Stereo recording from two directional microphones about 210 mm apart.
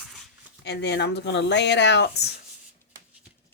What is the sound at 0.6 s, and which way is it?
Speech, 55° left (ahead or behind).